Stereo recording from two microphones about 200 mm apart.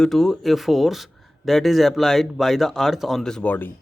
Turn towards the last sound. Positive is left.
turn(degrees=10)  # may be behind; listen again after turning